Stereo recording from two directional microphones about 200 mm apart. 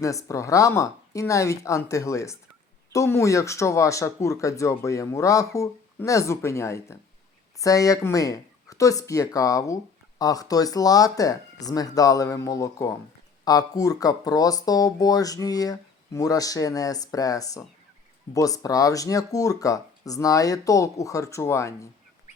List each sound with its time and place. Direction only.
0.0 s speech: 15° left (ahead or behind)